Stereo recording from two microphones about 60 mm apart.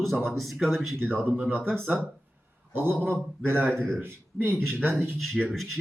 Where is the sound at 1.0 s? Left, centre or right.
Right.